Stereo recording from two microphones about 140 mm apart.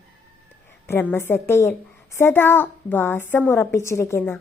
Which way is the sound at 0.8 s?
15° left (ahead or behind).